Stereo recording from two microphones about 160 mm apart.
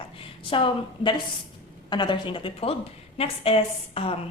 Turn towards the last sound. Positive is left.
turn(degrees=35)  # may be behind; listen again after turning